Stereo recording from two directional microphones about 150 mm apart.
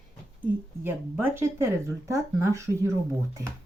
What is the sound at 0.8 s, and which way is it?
Speech, 15° right (ahead or behind).